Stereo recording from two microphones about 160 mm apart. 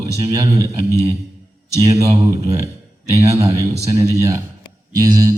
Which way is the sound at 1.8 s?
20° right (ahead or behind).